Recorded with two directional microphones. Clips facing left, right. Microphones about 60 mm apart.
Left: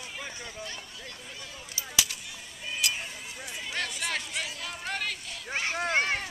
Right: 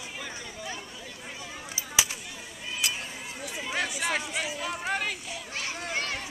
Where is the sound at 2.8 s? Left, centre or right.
Right.